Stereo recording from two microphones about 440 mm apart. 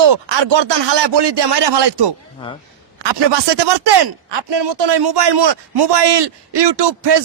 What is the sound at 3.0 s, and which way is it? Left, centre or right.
A man's voice, right.